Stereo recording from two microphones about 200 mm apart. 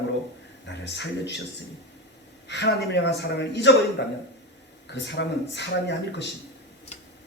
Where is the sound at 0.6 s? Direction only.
60° left (ahead or behind).